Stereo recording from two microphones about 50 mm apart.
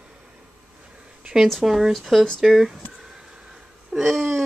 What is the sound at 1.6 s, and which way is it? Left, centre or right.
Speech, centre.